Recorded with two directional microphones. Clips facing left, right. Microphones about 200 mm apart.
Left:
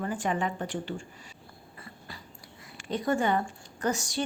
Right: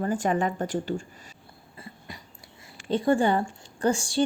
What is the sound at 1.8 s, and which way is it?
Dog, 20° right (ahead or behind).